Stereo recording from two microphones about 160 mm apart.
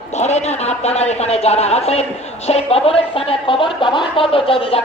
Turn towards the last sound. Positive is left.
turn(degrees=35)  # may be behind; listen again after turning